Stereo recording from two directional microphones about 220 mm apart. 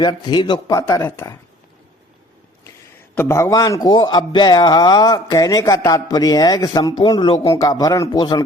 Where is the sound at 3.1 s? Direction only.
10° left (ahead or behind).